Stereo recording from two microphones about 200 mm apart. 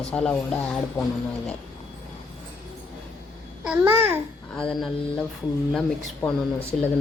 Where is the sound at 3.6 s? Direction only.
10° right (ahead or behind).